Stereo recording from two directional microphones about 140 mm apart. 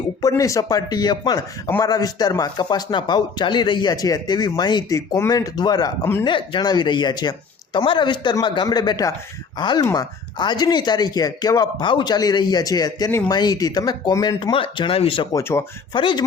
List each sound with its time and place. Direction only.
0.2 s speech: 25° left (ahead or behind)
14.5 s speech: 40° left (ahead or behind)
15.4 s speech: 20° left (ahead or behind)
16.0 s speech: 35° left (ahead or behind)